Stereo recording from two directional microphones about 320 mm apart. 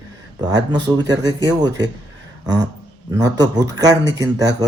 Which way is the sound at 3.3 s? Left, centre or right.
Centre.